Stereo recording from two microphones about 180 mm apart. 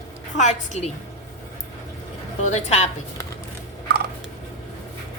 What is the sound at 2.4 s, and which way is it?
Speech, 40° left (ahead or behind).